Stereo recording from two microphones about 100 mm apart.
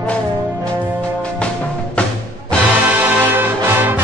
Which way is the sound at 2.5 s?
10° left (ahead or behind).